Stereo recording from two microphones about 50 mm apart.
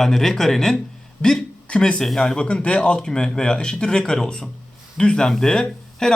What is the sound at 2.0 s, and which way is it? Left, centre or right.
Speech, centre.